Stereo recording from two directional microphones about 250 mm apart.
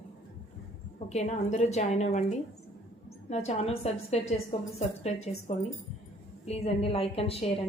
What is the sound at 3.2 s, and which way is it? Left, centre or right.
A woman's voice, left.